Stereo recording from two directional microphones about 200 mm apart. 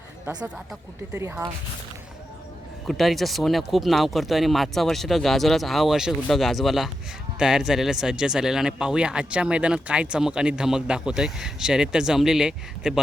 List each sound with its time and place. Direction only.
0.4 s speech: 5° right (ahead or behind)
1.1 s speech: 15° right (ahead or behind)
2.8 s speech: centre (ahead or behind)